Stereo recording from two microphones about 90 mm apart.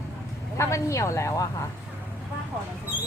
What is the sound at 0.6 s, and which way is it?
Speech, 35° left (ahead or behind).